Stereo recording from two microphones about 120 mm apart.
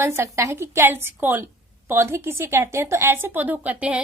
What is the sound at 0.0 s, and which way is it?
Speech, 20° right (ahead or behind).